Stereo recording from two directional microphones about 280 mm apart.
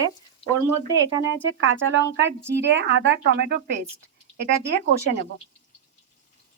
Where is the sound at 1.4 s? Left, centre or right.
Right.